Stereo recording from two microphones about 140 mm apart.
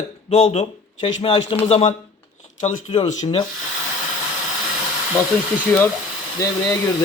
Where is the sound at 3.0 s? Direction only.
55° left (ahead or behind).